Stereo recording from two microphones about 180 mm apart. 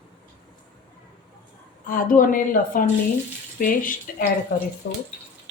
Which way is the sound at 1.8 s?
50° left (ahead or behind).